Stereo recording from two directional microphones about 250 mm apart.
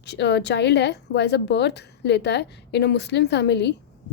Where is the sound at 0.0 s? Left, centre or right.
Left.